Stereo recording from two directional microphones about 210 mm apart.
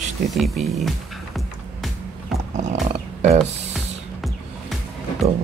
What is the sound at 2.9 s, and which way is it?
Music, 30° right (ahead or behind).